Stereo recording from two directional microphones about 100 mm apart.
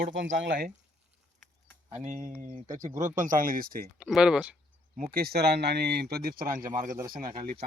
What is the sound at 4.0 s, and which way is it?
Speech, 10° right (ahead or behind).